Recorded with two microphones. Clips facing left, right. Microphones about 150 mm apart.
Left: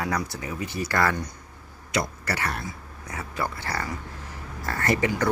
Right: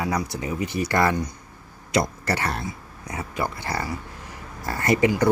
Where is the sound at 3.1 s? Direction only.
20° right (ahead or behind).